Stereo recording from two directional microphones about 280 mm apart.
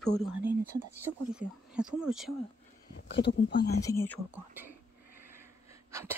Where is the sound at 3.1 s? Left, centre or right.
Left.